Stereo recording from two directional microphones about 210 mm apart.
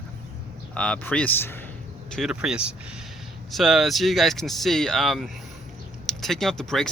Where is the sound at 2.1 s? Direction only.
Centre (ahead or behind).